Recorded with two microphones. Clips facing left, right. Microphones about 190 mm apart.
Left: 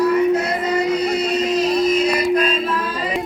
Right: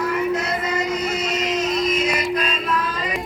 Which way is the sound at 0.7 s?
35° left (ahead or behind).